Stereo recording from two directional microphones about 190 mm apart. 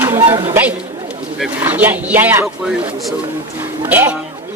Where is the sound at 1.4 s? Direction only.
10° right (ahead or behind).